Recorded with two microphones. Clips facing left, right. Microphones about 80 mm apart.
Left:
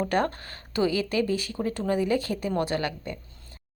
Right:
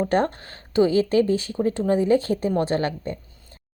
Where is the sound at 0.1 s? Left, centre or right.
Right.